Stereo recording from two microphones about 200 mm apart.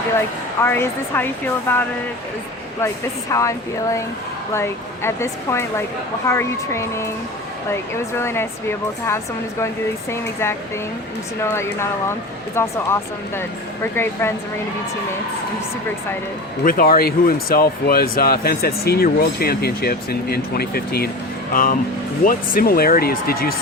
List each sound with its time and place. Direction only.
0.6 s speech: 10° left (ahead or behind)
3.3 s speech: 15° left (ahead or behind)
11.5 s speech: 15° left (ahead or behind)
16.6 s speech: 45° left (ahead or behind)